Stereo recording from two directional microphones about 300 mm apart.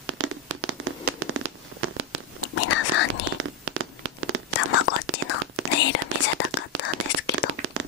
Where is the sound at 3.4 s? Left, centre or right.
Right.